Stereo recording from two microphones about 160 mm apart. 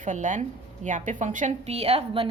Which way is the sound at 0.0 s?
50° right (ahead or behind).